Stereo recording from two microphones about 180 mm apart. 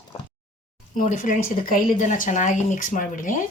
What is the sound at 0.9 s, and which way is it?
A woman's voice, 45° left (ahead or behind).